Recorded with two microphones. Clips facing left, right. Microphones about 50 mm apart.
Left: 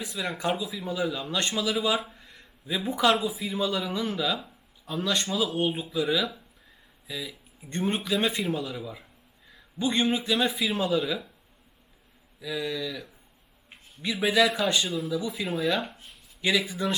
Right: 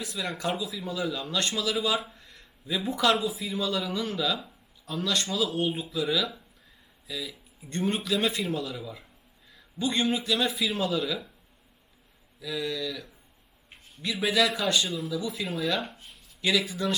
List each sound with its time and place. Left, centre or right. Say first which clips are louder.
0.1 s speech: left 3 dB; centre
4.9 s speech: left 1 dB; centre
5.5 s a man's voice: left 1 dB; left
12.4 s speech: left 1 dB; centre
15.4 s speech: left 2 dB; centre
16.6 s speech: left 1 dB; centre